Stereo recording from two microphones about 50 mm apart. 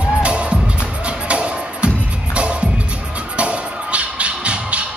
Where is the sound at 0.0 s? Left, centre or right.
Centre.